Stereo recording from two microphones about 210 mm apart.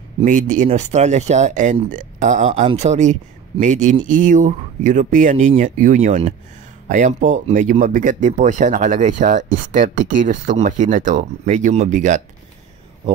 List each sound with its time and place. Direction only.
0.2 s speech: 40° right (ahead or behind)